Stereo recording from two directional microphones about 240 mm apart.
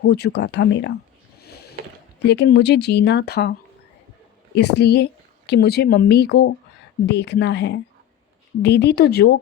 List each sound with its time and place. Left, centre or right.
0.1 s speech: left
1.4 s a sound: left
2.2 s speech: left
4.5 s speech: left